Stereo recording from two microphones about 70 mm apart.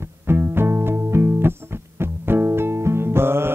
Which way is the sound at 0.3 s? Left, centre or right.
Right.